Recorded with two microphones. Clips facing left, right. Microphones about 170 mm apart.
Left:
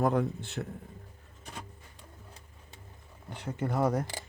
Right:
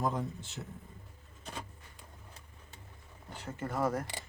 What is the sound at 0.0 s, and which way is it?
Speech, 65° left (ahead or behind).